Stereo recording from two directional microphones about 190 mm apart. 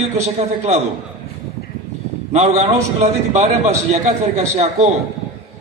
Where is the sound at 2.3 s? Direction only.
35° right (ahead or behind).